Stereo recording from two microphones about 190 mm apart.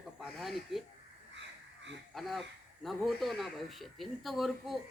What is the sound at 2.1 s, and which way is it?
A man's voice, centre (ahead or behind).